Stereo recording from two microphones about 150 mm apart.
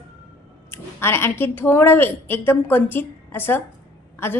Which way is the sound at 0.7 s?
15° left (ahead or behind).